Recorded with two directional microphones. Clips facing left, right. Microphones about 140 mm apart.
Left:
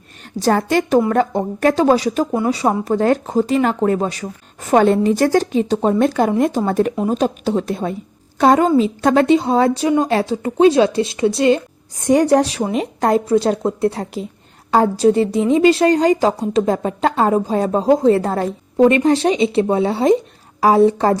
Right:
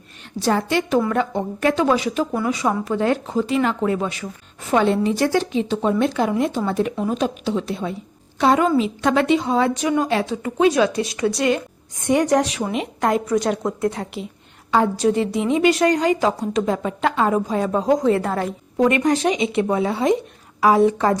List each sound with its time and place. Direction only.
0.3 s a woman's voice: 45° left (ahead or behind)